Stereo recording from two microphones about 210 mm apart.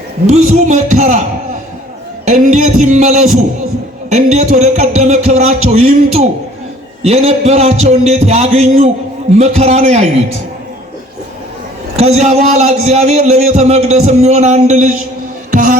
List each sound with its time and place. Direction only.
0.3 s a man's voice: 30° right (ahead or behind)
2.2 s a man's voice: 35° right (ahead or behind)
11.9 s a man's voice: 30° right (ahead or behind)
15.5 s music: 40° right (ahead or behind)